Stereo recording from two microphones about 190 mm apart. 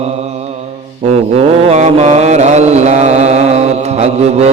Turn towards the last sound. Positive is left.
turn(degrees=-35)  # may be behind; listen again after turning